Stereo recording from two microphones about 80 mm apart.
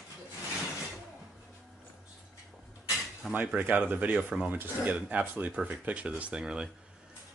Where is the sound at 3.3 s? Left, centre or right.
Centre.